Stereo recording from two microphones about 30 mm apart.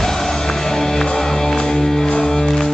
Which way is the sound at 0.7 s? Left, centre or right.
Centre.